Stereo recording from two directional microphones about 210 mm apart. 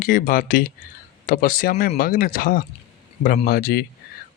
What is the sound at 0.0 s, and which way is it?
Speech, 40° left (ahead or behind).